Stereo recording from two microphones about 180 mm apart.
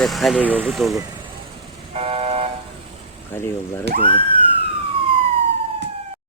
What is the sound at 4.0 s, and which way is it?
Speech, 30° left (ahead or behind).